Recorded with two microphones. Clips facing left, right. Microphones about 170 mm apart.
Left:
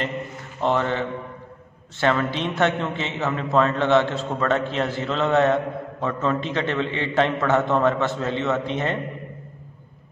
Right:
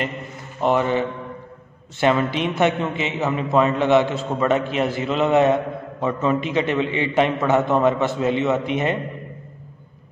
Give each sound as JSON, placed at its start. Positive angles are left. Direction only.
{"t": 0.6, "sound": "a man's voice", "side_deg": -10}